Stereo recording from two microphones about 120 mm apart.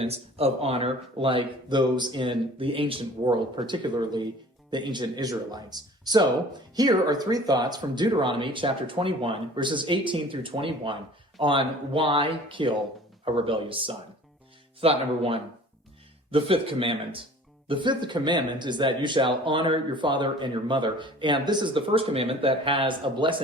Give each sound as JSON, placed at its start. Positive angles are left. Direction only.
{"t": 0.0, "sound": "speech", "side_deg": -55}